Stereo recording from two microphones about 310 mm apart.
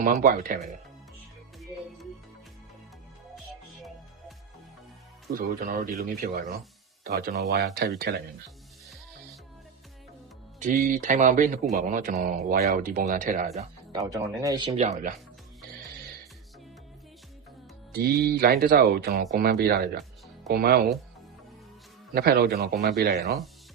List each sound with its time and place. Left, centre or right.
0.0 s speech: right
5.3 s speech: right
10.6 s speech: right
13.6 s speech: centre
17.9 s speech: right
22.1 s speech: right